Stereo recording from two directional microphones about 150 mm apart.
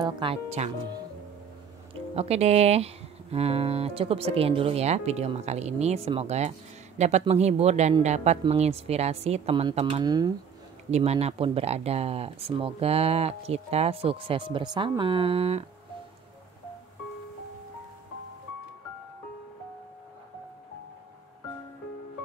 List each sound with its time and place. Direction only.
0.0 s speech: 35° right (ahead or behind)
2.1 s speech: 45° right (ahead or behind)
9.8 s speech: 30° right (ahead or behind)
10.9 s speech: 45° right (ahead or behind)